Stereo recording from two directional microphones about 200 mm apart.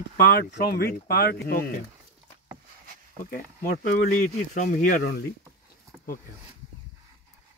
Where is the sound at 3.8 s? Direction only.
40° left (ahead or behind).